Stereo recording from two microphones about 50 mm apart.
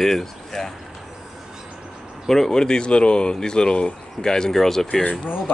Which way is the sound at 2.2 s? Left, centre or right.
Centre.